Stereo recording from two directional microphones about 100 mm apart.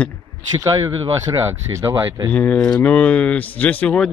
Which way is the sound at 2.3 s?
15° left (ahead or behind).